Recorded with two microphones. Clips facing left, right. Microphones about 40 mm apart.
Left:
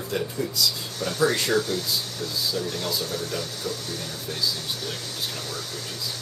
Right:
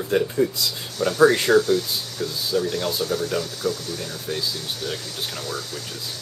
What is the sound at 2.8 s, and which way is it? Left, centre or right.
Speech, right.